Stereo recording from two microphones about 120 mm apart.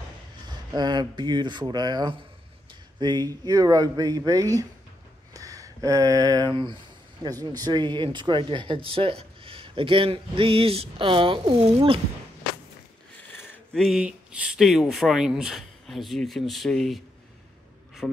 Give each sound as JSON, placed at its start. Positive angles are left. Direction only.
{"t": 0.5, "sound": "speech", "side_deg": -35}
{"t": 13.3, "sound": "a sound", "side_deg": 15}
{"t": 13.7, "sound": "speech", "side_deg": 0}
{"t": 18.0, "sound": "speech", "side_deg": 0}